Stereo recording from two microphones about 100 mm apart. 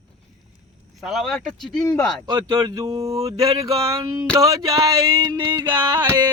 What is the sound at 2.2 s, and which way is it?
Speech, 50° right (ahead or behind).